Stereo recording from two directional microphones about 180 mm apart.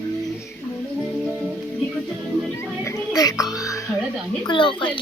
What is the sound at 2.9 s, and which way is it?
Music, 20° left (ahead or behind).